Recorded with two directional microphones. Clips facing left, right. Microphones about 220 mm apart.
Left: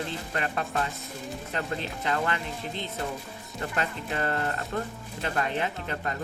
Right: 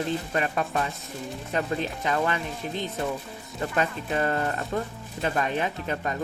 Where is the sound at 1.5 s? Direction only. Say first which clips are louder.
Right 5 dB; 15° right (ahead or behind).